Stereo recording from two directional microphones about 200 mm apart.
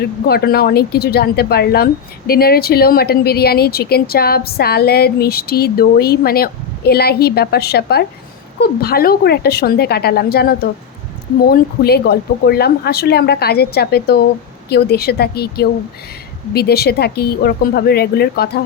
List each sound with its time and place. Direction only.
0.0 s speech: 50° left (ahead or behind)